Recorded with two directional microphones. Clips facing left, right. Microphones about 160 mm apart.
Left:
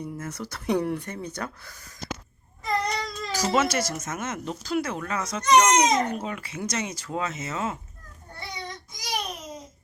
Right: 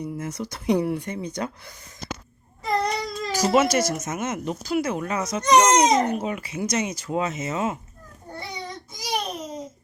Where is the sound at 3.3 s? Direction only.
10° right (ahead or behind).